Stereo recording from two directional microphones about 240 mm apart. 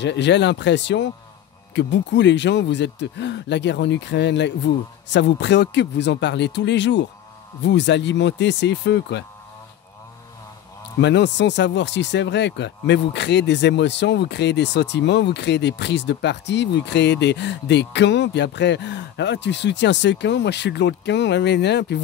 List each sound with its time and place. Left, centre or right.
0.0 s speech: left
11.0 s speech: left